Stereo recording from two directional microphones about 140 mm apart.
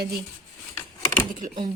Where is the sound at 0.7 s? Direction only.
15° left (ahead or behind).